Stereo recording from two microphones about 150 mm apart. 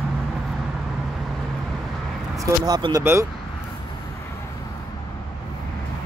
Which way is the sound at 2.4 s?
30° right (ahead or behind).